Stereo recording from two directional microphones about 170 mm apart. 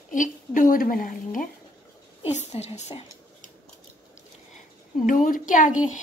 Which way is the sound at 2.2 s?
40° left (ahead or behind).